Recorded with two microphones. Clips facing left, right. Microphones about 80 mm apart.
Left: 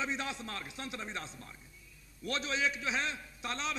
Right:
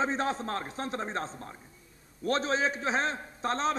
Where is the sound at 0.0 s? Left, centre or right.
Right.